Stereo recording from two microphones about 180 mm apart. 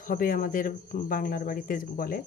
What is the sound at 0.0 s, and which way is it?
Speech, 50° left (ahead or behind).